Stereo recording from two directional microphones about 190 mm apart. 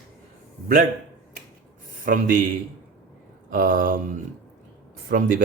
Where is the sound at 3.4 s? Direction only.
50° right (ahead or behind).